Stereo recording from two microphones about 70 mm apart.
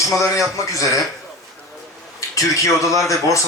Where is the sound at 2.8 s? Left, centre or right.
Left.